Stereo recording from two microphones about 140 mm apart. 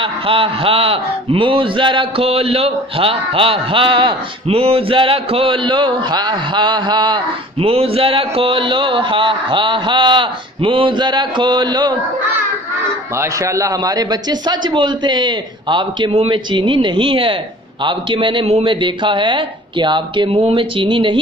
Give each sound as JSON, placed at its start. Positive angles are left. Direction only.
{"t": 0.0, "sound": "a man's voice", "side_deg": -40}
{"t": 7.6, "sound": "a man's voice", "side_deg": -45}
{"t": 13.2, "sound": "a man's voice", "side_deg": -20}